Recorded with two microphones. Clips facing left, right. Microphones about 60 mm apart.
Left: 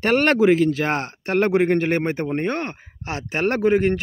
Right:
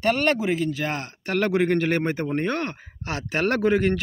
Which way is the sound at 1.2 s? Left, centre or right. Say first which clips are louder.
Left 3 dB; left.